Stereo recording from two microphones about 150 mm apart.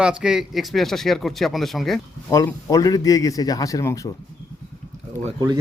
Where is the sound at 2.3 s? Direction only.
20° left (ahead or behind).